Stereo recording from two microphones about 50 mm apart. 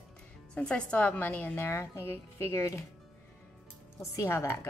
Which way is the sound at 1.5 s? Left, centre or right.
Left.